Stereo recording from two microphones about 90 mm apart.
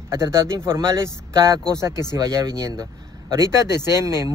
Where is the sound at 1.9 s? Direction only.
50° left (ahead or behind).